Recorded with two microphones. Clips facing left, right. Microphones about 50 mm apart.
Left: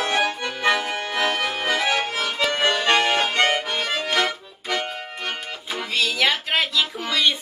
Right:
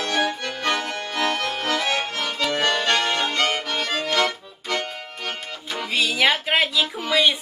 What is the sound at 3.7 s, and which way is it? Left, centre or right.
Accordion, centre.